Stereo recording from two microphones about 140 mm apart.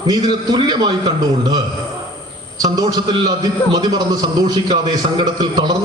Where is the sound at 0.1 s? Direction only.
30° right (ahead or behind).